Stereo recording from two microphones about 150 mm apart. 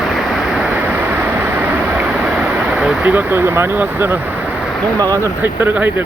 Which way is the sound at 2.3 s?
5° right (ahead or behind).